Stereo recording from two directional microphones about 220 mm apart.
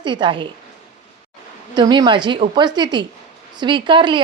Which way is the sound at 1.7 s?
20° right (ahead or behind).